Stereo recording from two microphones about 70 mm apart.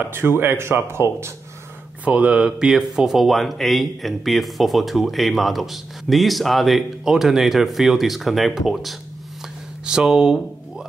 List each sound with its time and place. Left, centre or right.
0.0 s a man's voice: right
2.0 s speech: centre